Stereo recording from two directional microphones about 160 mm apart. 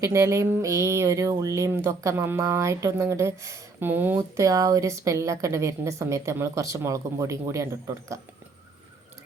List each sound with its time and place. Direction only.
0.0 s speech: 20° right (ahead or behind)